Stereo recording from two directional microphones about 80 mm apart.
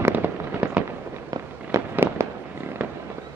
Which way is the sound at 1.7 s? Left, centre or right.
Right.